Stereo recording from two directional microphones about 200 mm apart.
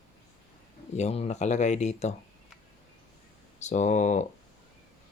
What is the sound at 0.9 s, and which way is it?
Speech, 30° left (ahead or behind).